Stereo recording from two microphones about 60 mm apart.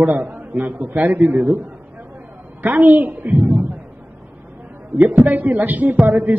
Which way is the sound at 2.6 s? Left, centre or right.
Right.